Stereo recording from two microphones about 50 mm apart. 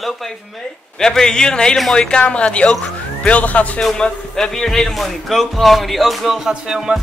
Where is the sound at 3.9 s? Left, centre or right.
Centre.